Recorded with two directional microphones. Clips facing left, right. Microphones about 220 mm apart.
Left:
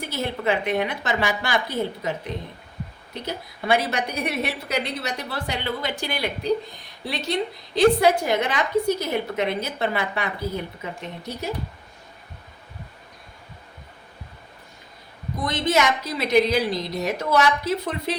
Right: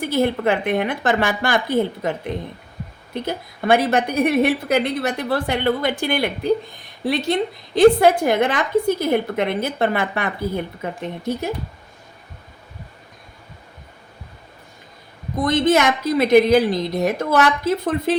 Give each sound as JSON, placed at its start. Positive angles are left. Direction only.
{"t": 0.0, "sound": "a woman's voice", "side_deg": -50}
{"t": 3.2, "sound": "a woman's voice", "side_deg": -50}
{"t": 15.4, "sound": "a woman's voice", "side_deg": -50}